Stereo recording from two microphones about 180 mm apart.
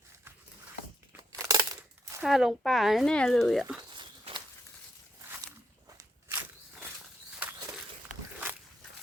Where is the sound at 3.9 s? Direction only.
25° right (ahead or behind).